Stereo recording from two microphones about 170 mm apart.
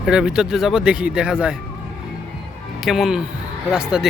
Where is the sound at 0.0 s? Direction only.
5° right (ahead or behind).